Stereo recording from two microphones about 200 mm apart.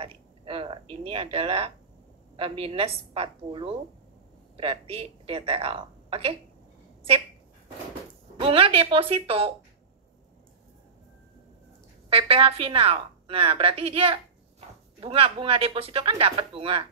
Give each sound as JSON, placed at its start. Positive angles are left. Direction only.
{"t": 0.0, "sound": "a sound", "side_deg": -25}
{"t": 2.3, "sound": "a woman's voice", "side_deg": -30}
{"t": 8.4, "sound": "a woman's voice", "side_deg": -25}
{"t": 12.1, "sound": "a woman's voice", "side_deg": -30}